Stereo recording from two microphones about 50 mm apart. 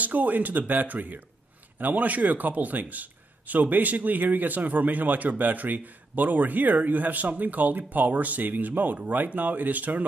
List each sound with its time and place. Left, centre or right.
0.0 s a man's voice: right